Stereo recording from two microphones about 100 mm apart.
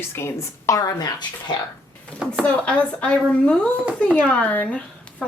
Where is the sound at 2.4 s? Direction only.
15° left (ahead or behind).